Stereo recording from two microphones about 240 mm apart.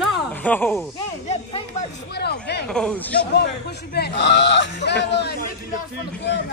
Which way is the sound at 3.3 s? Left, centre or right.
Left.